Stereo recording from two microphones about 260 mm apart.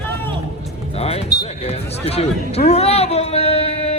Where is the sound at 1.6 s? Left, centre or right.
Left.